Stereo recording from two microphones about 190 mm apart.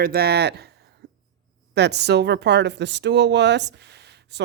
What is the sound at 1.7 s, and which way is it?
Speech, 60° right (ahead or behind).